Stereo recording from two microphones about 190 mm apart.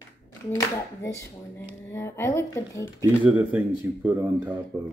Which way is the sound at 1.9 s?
15° left (ahead or behind).